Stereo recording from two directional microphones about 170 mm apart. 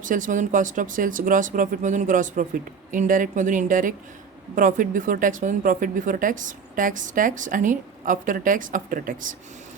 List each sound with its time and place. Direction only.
0.0 s speech: 50° right (ahead or behind)